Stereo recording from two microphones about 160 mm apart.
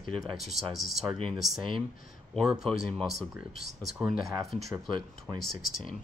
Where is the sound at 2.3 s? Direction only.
Centre (ahead or behind).